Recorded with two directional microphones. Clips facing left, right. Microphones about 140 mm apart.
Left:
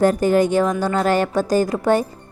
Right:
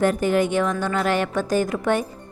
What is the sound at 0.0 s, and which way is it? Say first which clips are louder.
A woman's voice: left 4 dB; 40° left (ahead or behind).